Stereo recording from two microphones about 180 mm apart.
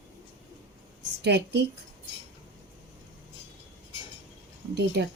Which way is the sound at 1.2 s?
70° right (ahead or behind).